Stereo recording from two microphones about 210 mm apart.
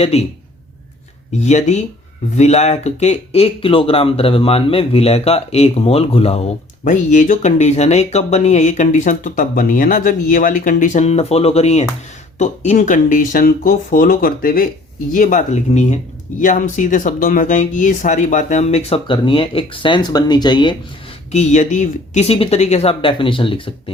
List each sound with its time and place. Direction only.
0.0 s speech: 30° left (ahead or behind)
1.3 s speech: 35° left (ahead or behind)
21.3 s speech: 35° left (ahead or behind)